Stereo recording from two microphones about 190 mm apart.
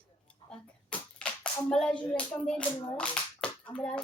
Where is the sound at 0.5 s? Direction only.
5° left (ahead or behind).